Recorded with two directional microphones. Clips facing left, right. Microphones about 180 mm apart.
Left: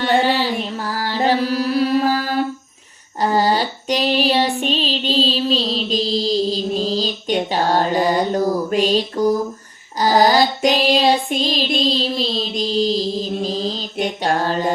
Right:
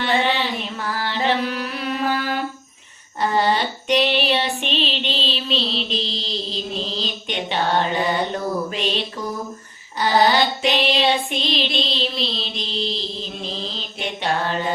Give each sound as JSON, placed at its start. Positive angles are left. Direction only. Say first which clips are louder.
{"t": 0.0, "sound": "music", "louder": "left 4 dB", "side_deg": 40}
{"t": 3.2, "sound": "female singing", "louder": "left 3 dB", "side_deg": 35}
{"t": 10.0, "sound": "child singing", "louder": "left 3 dB", "side_deg": 40}